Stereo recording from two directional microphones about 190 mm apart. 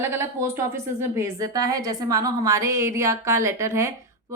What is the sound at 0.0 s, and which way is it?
A woman's voice, 15° right (ahead or behind).